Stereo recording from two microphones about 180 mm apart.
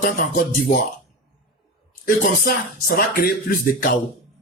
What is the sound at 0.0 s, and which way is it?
Speech, 50° left (ahead or behind).